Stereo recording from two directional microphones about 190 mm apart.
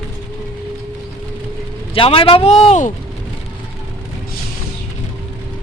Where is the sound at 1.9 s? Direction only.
30° left (ahead or behind).